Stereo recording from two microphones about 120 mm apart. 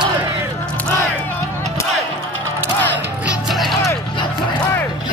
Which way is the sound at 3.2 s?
Centre (ahead or behind).